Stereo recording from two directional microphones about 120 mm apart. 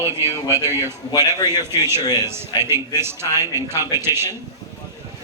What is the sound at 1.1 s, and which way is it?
Speech, 30° left (ahead or behind).